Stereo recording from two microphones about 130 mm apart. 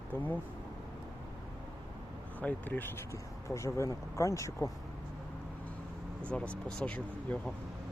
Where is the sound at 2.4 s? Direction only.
15° left (ahead or behind).